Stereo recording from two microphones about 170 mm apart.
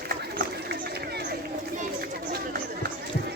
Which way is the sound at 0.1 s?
65° right (ahead or behind).